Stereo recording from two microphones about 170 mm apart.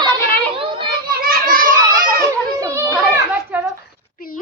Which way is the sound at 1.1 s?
60° right (ahead or behind).